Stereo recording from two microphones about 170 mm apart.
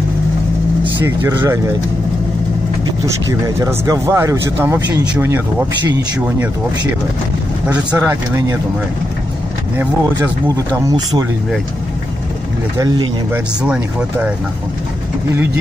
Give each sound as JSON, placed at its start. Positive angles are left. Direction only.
{"t": 1.0, "sound": "speech", "side_deg": -15}
{"t": 3.3, "sound": "speech", "side_deg": -20}
{"t": 7.9, "sound": "speech", "side_deg": -10}
{"t": 10.2, "sound": "speech", "side_deg": -20}
{"t": 12.7, "sound": "speech", "side_deg": -25}
{"t": 13.3, "sound": "speech", "side_deg": -5}